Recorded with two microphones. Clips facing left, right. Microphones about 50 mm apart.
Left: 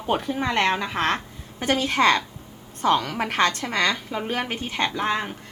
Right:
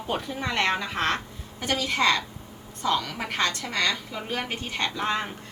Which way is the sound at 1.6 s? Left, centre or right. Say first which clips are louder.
Left 4 dB; left.